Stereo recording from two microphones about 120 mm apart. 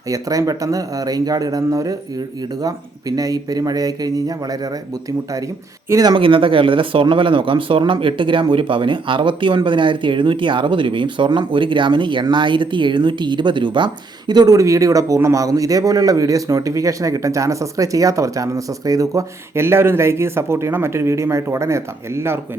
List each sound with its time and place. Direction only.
0.1 s speech: 30° right (ahead or behind)
5.9 s speech: 30° right (ahead or behind)
6.1 s speech: 45° right (ahead or behind); by 22.4 s 20° right (ahead or behind)